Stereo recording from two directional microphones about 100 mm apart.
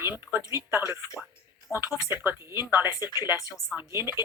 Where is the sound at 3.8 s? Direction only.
25° right (ahead or behind).